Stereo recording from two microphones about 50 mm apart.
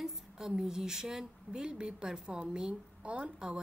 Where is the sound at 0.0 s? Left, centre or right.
Centre.